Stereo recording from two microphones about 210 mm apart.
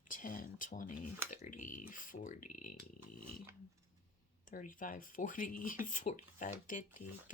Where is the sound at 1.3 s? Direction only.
40° left (ahead or behind).